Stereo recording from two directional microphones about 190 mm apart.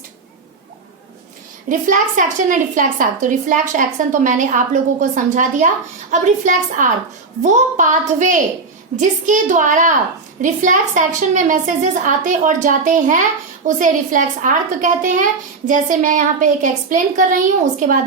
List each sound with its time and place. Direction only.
1.7 s a woman's voice: 40° right (ahead or behind)